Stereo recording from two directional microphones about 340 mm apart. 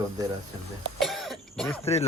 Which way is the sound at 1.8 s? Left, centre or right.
Centre.